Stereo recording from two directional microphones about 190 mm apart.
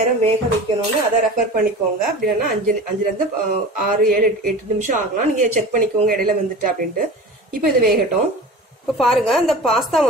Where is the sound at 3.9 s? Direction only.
45° right (ahead or behind).